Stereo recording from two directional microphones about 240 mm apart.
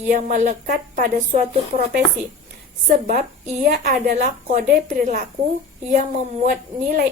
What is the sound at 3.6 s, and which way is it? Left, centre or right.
A woman's voice, right.